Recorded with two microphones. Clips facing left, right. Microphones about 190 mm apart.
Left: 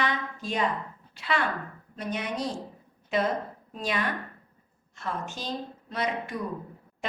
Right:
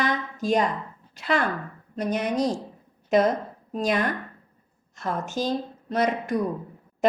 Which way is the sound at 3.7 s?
45° right (ahead or behind).